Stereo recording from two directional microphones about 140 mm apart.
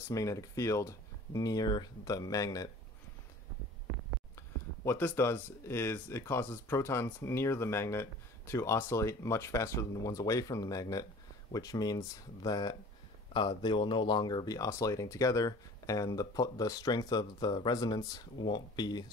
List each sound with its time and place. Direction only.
0.1 s speech: 25° left (ahead or behind)
4.4 s speech: 15° left (ahead or behind)